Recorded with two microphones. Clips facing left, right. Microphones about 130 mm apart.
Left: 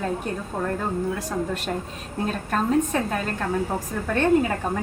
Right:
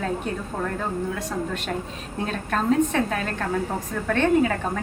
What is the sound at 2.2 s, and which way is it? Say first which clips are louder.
A woman's voice: even; 5° left (ahead or behind).